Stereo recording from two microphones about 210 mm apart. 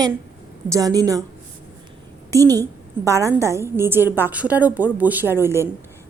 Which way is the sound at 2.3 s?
15° right (ahead or behind).